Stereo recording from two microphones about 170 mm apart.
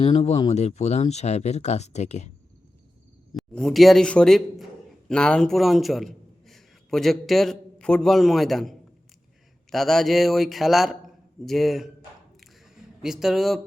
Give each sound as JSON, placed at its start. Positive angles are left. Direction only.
{"t": 0.0, "sound": "speech", "side_deg": 35}
{"t": 3.3, "sound": "a man's voice", "side_deg": 0}
{"t": 9.7, "sound": "a man's voice", "side_deg": 0}
{"t": 12.4, "sound": "a sound", "side_deg": 0}